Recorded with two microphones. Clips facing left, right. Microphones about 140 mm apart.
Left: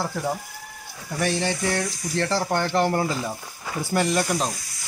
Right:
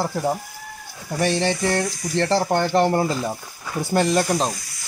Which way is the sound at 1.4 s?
25° right (ahead or behind).